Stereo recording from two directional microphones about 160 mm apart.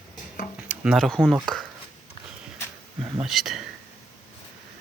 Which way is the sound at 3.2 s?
Centre (ahead or behind).